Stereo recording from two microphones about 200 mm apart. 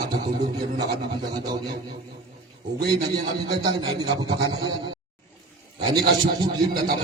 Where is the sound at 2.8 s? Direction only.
20° right (ahead or behind).